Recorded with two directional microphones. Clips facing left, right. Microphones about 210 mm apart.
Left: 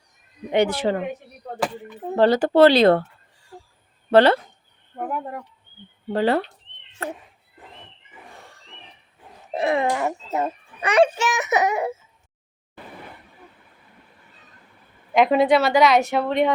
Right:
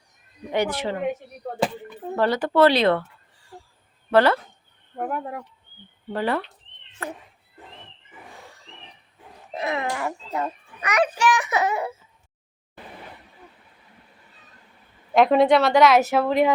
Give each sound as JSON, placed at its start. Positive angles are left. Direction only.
{"t": 0.5, "sound": "a child's voice", "side_deg": 25}
{"t": 2.1, "sound": "speech", "side_deg": 30}
{"t": 4.1, "sound": "a child's voice", "side_deg": 30}
{"t": 4.9, "sound": "a woman's voice", "side_deg": -5}
{"t": 6.1, "sound": "a child's voice", "side_deg": 30}
{"t": 9.6, "sound": "a child's voice", "side_deg": 30}
{"t": 15.1, "sound": "a woman's voice", "side_deg": 0}